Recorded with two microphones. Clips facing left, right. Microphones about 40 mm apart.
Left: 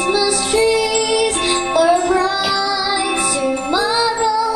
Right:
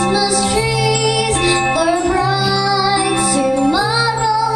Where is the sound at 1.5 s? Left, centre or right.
Right.